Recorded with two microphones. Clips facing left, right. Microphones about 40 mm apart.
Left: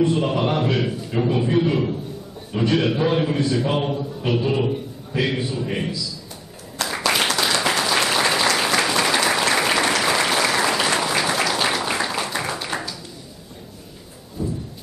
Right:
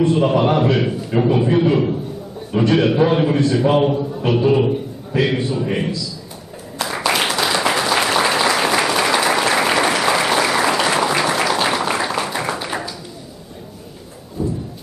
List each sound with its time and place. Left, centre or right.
0.0 s a man's voice: centre
7.1 s applause: centre
14.4 s a sound: centre